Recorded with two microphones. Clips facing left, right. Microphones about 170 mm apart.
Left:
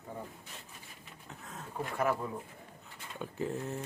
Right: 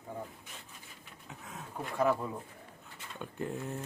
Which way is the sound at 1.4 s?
Centre (ahead or behind).